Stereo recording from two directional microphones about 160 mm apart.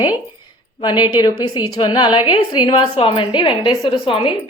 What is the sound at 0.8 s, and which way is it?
A woman's voice, 30° left (ahead or behind).